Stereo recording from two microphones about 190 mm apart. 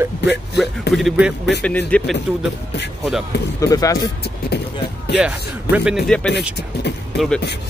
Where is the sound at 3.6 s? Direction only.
15° left (ahead or behind).